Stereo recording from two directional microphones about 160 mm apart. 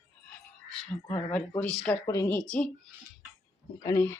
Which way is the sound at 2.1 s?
15° left (ahead or behind).